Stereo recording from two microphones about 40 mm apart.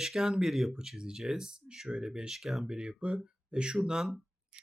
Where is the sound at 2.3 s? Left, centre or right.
Centre.